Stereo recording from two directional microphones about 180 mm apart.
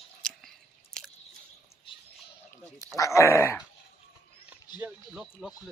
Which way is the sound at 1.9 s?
30° left (ahead or behind).